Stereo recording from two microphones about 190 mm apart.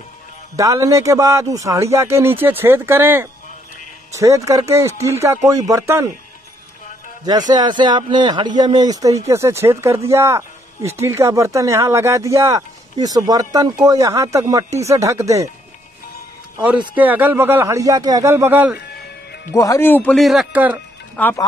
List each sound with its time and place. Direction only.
0.6 s speech: 15° right (ahead or behind)
7.2 s speech: 20° right (ahead or behind)
16.9 s speech: 10° right (ahead or behind)
19.5 s speech: 15° left (ahead or behind); by 20.8 s 10° right (ahead or behind)
21.2 s speech: 10° left (ahead or behind)